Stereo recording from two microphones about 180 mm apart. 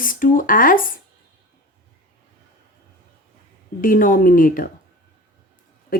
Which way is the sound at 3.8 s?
50° left (ahead or behind).